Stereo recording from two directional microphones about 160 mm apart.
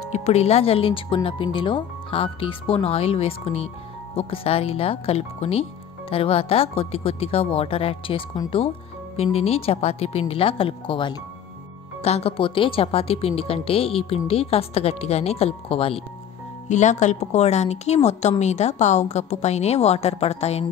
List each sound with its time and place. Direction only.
0.1 s speech: 40° left (ahead or behind)
16.6 s a woman's voice: 45° left (ahead or behind)